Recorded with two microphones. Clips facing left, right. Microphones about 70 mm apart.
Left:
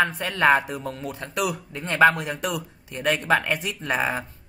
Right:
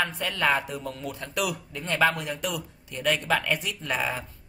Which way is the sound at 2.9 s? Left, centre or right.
Left.